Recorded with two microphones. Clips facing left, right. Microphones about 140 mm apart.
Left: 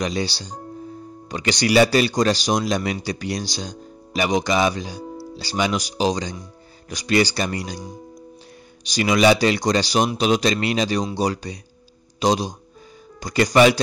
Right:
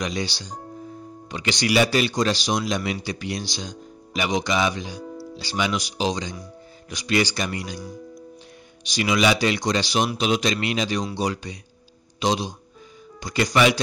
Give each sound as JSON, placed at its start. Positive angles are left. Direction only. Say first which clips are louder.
{"t": 0.0, "sound": "speech", "louder": "left 3 dB", "side_deg": 35}
{"t": 8.8, "sound": "speech", "louder": "left 4 dB", "side_deg": 40}